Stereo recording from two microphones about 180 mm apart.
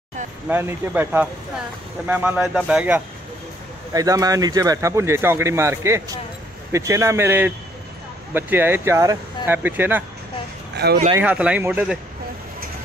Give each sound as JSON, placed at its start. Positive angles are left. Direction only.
{"t": 0.5, "sound": "speech", "side_deg": -10}
{"t": 3.9, "sound": "speech", "side_deg": -20}
{"t": 10.8, "sound": "speech", "side_deg": -60}
{"t": 11.1, "sound": "speech", "side_deg": -10}